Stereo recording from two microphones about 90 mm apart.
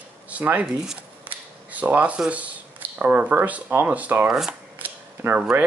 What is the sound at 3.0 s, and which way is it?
Speech, 20° right (ahead or behind).